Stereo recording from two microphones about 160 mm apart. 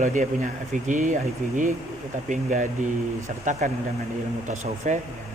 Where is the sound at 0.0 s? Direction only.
50° right (ahead or behind).